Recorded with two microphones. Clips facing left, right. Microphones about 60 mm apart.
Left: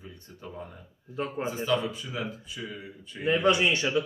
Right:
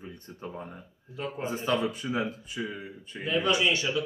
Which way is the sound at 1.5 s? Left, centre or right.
Right.